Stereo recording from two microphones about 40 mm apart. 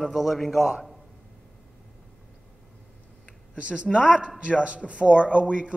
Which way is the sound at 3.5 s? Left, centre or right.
Right.